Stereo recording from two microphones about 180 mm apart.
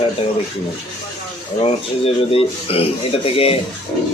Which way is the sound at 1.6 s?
30° left (ahead or behind).